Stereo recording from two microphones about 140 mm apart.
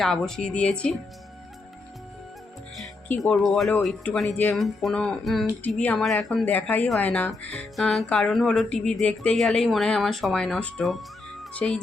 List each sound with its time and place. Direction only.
0.0 s speech: 5° left (ahead or behind)
3.2 s speech: centre (ahead or behind)
6.4 s speech: 10° left (ahead or behind)